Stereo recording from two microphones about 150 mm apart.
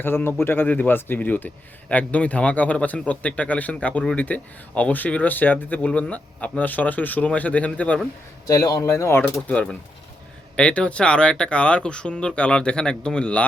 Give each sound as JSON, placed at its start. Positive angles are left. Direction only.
{"t": 0.0, "sound": "a man's voice", "side_deg": 15}
{"t": 8.4, "sound": "a man's voice", "side_deg": 20}